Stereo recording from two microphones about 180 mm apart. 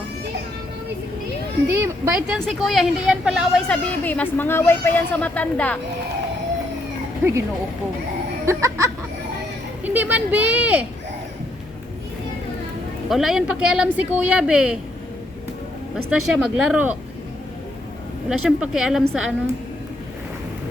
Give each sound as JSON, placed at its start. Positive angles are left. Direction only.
{"t": 1.7, "sound": "a woman's voice", "side_deg": -15}
{"t": 8.4, "sound": "speech", "side_deg": -15}
{"t": 13.1, "sound": "a woman's voice", "side_deg": 0}
{"t": 16.0, "sound": "speech", "side_deg": -5}
{"t": 18.3, "sound": "a woman's voice", "side_deg": -5}